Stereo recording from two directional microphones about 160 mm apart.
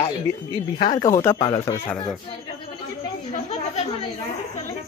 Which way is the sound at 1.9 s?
5° left (ahead or behind).